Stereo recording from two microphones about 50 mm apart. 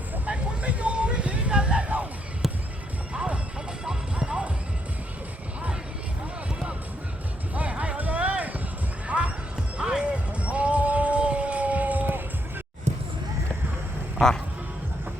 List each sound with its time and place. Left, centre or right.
0.3 s vehicle: right
3.1 s music: right
7.5 s music: right
9.0 s basketball bounce: right
9.7 s music: centre; by 12.2 s right